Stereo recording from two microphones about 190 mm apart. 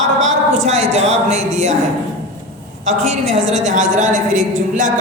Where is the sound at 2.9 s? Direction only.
35° right (ahead or behind).